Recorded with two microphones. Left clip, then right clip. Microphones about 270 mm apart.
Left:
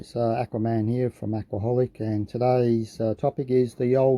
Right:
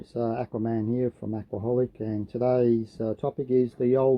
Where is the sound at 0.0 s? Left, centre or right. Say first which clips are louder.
Left 4 dB; left.